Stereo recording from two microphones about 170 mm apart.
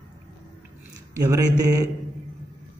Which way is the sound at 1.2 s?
20° right (ahead or behind).